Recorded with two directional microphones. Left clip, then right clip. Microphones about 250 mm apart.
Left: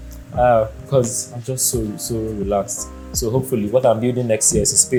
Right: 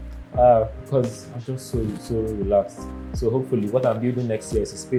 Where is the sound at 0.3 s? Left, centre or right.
Left.